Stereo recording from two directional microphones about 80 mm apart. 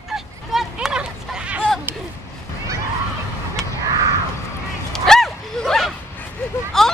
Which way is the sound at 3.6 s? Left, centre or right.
Centre.